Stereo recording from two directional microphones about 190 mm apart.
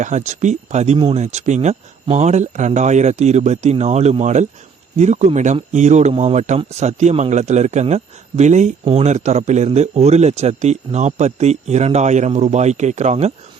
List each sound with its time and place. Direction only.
0.0 s speech: 40° right (ahead or behind)